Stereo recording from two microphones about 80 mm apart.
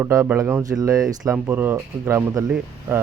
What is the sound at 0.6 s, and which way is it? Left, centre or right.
Speech, right.